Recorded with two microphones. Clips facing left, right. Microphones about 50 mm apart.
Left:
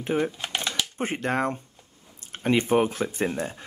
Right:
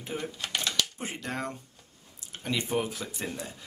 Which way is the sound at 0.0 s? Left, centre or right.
Left.